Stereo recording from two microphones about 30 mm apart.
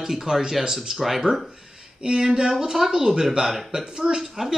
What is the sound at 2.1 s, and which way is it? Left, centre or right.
Speech, centre.